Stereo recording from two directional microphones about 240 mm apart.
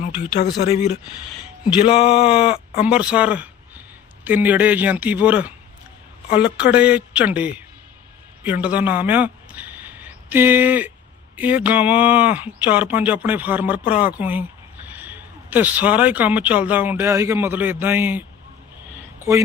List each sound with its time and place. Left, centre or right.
0.0 s speech: left
1.8 s speech: left
2.8 s a man's voice: centre